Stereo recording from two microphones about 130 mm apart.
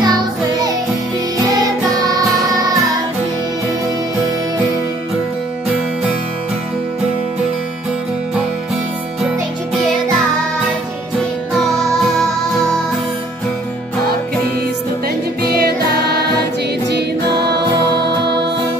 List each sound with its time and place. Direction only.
0.0 s music: 30° right (ahead or behind)